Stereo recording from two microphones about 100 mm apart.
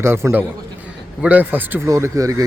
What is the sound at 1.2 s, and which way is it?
Speech, 15° right (ahead or behind).